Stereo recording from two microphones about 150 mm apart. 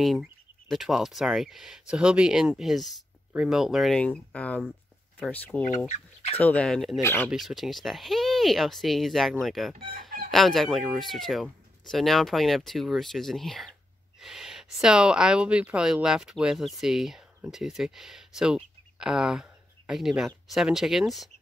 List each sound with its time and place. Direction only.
0.0 s speech: centre (ahead or behind)
7.0 s speech: 15° left (ahead or behind)
7.2 s speech: centre (ahead or behind)